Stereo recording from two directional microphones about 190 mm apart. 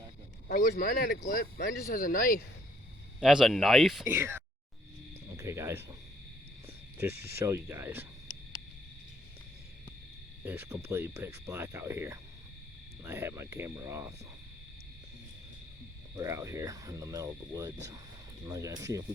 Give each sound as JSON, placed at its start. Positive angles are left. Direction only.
{"t": 0.4, "sound": "speech", "side_deg": 55}
{"t": 3.2, "sound": "speech", "side_deg": 0}
{"t": 4.1, "sound": "speech", "side_deg": -10}
{"t": 7.3, "sound": "speech", "side_deg": -15}
{"t": 10.4, "sound": "speech", "side_deg": -15}
{"t": 16.1, "sound": "speech", "side_deg": -15}